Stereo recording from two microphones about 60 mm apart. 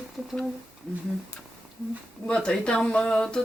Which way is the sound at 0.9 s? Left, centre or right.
Centre.